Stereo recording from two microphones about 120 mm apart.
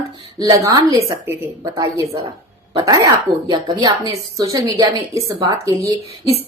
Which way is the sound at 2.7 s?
35° right (ahead or behind).